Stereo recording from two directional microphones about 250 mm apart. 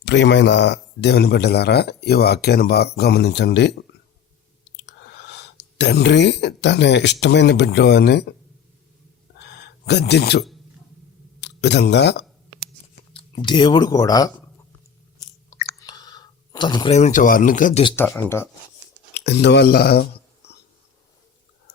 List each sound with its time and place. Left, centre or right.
0.0 s speech: left
9.4 s a sound: left
11.3 s speech: left
13.1 s speech: centre
15.8 s a sound: centre; by 17.8 s left
17.8 s speech: centre
19.1 s speech: left